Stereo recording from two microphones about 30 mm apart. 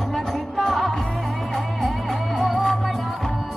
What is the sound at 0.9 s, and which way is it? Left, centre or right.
Music, centre.